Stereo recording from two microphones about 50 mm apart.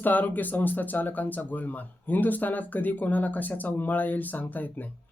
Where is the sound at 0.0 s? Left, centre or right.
Left.